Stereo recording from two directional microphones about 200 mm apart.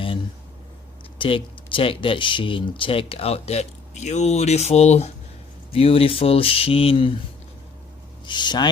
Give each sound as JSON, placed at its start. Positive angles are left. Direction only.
{"t": 1.2, "sound": "speech", "side_deg": 25}
{"t": 8.3, "sound": "speech", "side_deg": 20}